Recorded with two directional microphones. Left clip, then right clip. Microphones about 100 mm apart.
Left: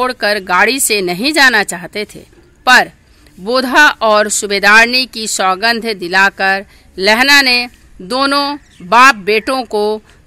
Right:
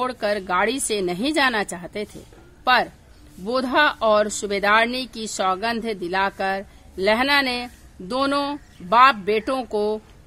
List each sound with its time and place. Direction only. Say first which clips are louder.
0.0 s speech: left 9 dB; 40° left (ahead or behind)